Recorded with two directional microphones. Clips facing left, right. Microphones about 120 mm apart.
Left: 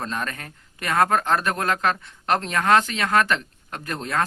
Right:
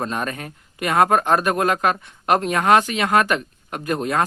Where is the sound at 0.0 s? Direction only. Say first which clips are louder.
Right 4 dB; 20° right (ahead or behind).